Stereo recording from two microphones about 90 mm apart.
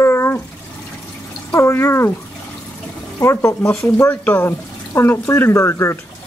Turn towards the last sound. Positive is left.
turn(degrees=30)  # may be behind; listen again after turning